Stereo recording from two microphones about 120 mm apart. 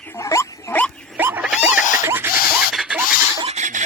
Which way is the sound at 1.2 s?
15° right (ahead or behind).